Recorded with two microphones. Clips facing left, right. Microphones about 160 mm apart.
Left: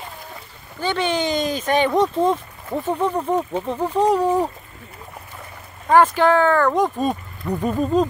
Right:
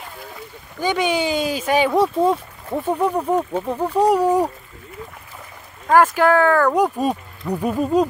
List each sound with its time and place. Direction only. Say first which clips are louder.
0.7 s speech: right 2 dB; 10° right (ahead or behind)
6.1 s speech: right 1 dB; 5° right (ahead or behind)